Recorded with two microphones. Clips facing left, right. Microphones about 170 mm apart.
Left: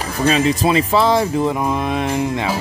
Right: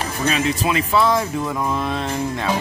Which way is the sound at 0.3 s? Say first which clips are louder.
Left 6 dB; 30° left (ahead or behind).